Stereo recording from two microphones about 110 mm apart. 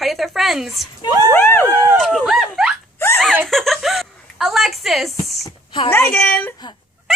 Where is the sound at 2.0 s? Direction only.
Centre (ahead or behind).